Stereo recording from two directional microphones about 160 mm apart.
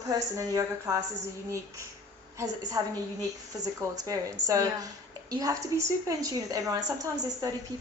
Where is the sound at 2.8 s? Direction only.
20° right (ahead or behind).